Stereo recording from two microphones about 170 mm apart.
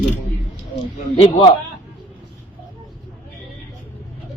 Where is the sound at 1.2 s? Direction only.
30° left (ahead or behind).